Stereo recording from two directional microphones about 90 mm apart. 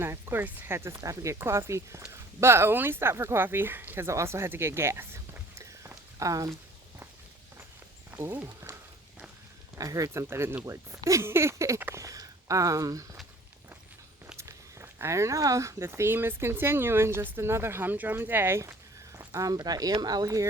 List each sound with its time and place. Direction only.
0.0 s speech: 25° right (ahead or behind)
8.1 s speech: 25° right (ahead or behind)
9.7 s speech: 40° right (ahead or behind)
10.2 s speech: 30° right (ahead or behind)
11.9 s a sound: 35° right (ahead or behind)
14.3 s speech: 30° right (ahead or behind)